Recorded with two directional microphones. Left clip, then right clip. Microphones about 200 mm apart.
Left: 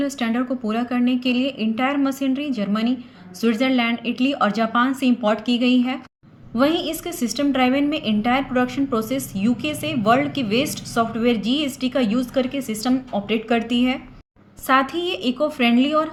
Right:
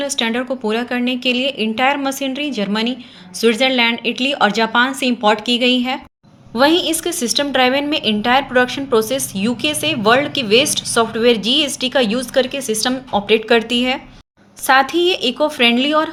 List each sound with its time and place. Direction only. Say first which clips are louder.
0.0 s a woman's voice: right 5 dB; 15° right (ahead or behind)